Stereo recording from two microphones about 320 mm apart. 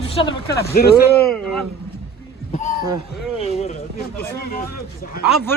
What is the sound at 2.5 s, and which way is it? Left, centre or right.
Speech, left.